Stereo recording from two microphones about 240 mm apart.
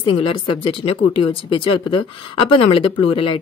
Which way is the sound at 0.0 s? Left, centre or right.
Left.